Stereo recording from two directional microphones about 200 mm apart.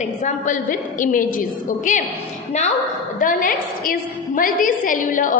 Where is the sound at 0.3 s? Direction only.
40° left (ahead or behind).